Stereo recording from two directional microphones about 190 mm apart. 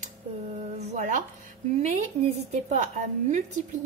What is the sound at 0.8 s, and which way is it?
Speech, 40° right (ahead or behind).